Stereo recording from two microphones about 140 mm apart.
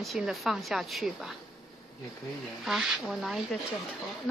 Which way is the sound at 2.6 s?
5° right (ahead or behind).